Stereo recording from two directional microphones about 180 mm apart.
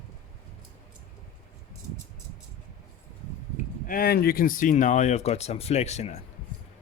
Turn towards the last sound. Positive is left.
turn(degrees=40)  # may be behind; listen again after turning